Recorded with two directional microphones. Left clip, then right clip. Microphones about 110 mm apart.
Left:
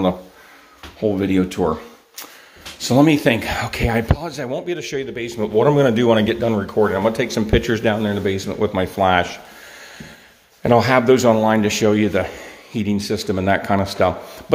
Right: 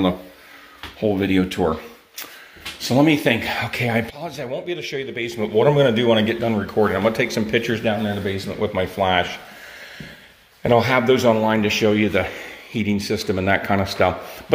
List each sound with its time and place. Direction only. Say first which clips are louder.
1.0 s speech: left 1 dB; 15° left (ahead or behind)
2.8 s speech: left 2 dB; 35° left (ahead or behind)
4.5 s speech: left 2 dB; 50° left (ahead or behind)
5.1 s speech: even; 20° left (ahead or behind)
5.4 s speech: left 1 dB; 30° left (ahead or behind)
6.6 s speech: even; 15° left (ahead or behind)
7.5 s speech: left 4 dB; 45° left (ahead or behind)
7.8 s speech: left 3 dB; 75° left (ahead or behind); by 9.4 s 40° left (ahead or behind)
10.6 s speech: left 2 dB; 30° left (ahead or behind)
12.2 s speech: even; 15° left (ahead or behind)